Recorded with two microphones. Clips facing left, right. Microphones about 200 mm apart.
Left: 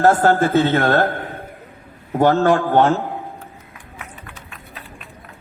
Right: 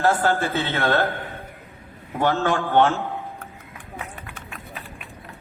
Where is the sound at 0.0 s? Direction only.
45° left (ahead or behind).